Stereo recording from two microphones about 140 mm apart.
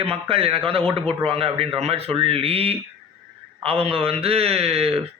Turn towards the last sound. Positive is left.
turn(degrees=-45)  # may be behind; listen again after turning